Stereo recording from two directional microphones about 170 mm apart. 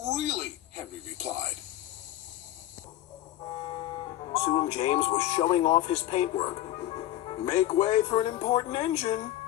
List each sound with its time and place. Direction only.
0.0 s a sound: 40° right (ahead or behind)
3.5 s music: 30° left (ahead or behind)
4.8 s speech: 40° left (ahead or behind)